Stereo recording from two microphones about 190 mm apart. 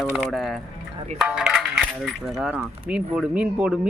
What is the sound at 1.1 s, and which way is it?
Speech, 5° right (ahead or behind).